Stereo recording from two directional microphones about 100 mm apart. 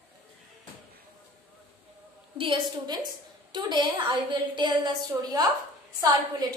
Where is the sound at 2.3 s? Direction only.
60° right (ahead or behind).